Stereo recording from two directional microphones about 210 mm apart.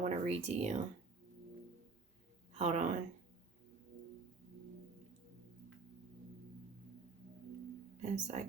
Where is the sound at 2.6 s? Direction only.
35° right (ahead or behind).